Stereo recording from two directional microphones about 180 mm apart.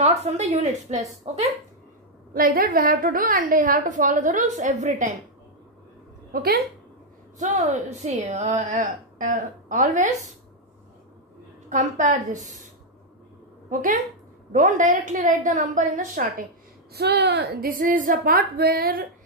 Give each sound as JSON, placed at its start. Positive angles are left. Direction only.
{"t": 0.0, "sound": "speech", "side_deg": -40}
{"t": 2.3, "sound": "a woman's voice", "side_deg": -55}
{"t": 6.3, "sound": "a woman's voice", "side_deg": -55}
{"t": 7.3, "sound": "speech", "side_deg": -40}
{"t": 11.7, "sound": "a woman's voice", "side_deg": -40}
{"t": 13.7, "sound": "a woman's voice", "side_deg": -45}
{"t": 16.9, "sound": "a woman's voice", "side_deg": -65}